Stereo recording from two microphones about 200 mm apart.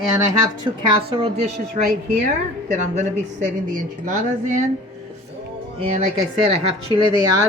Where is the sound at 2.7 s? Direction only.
35° right (ahead or behind).